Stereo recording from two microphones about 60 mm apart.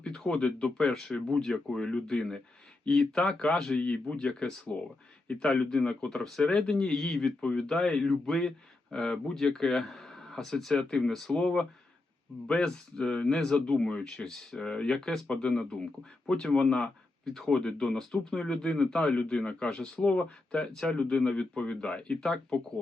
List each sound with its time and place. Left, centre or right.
0.0 s speech: centre